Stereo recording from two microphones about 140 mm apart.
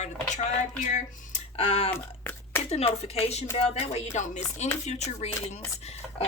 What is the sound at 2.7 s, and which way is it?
A woman's voice, 50° left (ahead or behind).